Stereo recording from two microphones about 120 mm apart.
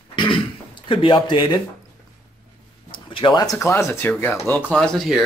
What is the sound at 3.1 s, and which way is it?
Speech, 40° left (ahead or behind).